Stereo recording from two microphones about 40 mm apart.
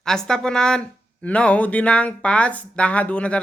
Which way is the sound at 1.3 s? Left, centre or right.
Left.